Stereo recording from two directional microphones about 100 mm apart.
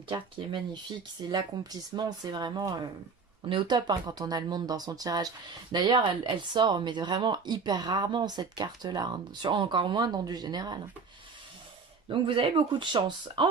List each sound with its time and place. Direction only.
0.1 s speech: 50° right (ahead or behind)
12.0 s speech: 60° right (ahead or behind)